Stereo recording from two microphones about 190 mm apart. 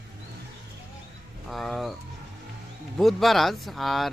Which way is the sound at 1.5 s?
Centre (ahead or behind).